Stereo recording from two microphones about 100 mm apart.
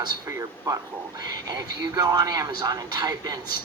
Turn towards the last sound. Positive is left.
turn(degrees=-40)  # may be behind; listen again after turning